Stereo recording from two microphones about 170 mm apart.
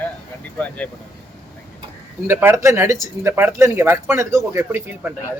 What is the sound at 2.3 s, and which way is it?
Speech, 15° right (ahead or behind).